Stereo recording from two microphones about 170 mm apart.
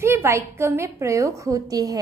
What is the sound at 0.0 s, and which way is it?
A woman's voice, 15° right (ahead or behind).